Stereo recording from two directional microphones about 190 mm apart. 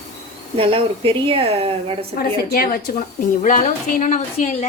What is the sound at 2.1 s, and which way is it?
Speech, 50° left (ahead or behind).